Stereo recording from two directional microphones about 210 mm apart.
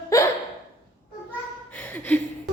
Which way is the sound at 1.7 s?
10° left (ahead or behind).